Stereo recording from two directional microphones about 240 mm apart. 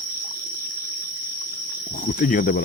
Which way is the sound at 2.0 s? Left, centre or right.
Left.